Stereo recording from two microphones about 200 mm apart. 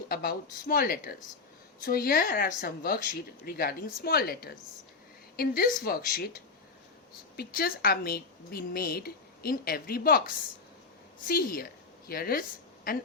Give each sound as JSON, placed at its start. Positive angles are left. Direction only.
{"t": 0.1, "sound": "a woman's voice", "side_deg": 50}
{"t": 7.3, "sound": "a woman's voice", "side_deg": 50}